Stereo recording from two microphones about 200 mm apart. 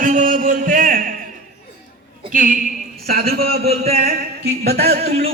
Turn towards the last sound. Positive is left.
turn(degrees=-50)  # may be behind; listen again after turning